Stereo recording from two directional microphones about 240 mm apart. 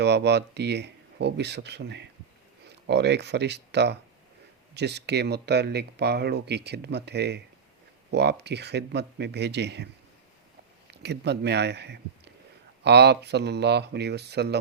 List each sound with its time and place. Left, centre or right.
0.0 s speech: right
10.9 s speech: right